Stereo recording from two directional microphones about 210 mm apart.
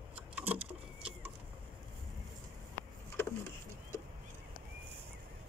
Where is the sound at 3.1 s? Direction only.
15° left (ahead or behind).